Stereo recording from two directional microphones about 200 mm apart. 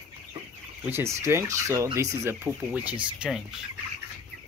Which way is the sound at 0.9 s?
15° right (ahead or behind).